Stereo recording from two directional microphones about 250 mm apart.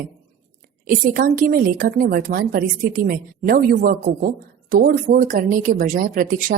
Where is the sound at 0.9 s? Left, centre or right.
Right.